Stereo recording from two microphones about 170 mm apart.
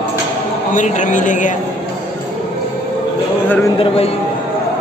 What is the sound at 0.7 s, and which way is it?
Speech, 45° left (ahead or behind).